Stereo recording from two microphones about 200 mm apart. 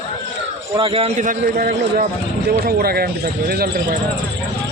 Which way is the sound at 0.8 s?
25° right (ahead or behind).